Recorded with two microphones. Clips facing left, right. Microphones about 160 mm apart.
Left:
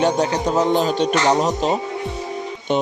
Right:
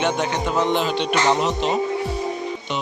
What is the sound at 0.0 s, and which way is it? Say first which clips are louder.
Music: left 4 dB; 40° left (ahead or behind).